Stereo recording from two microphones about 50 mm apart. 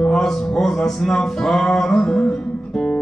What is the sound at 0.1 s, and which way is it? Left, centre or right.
Music, centre.